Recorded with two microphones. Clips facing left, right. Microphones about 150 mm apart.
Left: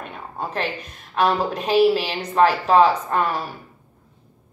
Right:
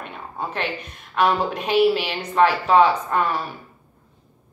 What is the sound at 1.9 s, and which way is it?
A woman's voice, 40° left (ahead or behind).